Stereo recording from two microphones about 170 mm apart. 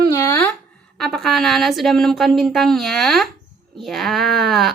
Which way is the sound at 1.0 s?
Centre (ahead or behind).